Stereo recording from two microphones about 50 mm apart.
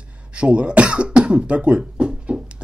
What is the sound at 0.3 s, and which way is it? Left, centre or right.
Speech, right.